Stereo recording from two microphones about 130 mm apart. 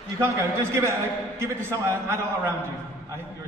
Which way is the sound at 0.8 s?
20° right (ahead or behind).